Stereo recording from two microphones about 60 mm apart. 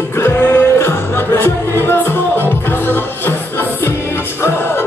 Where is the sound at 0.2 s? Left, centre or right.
Left.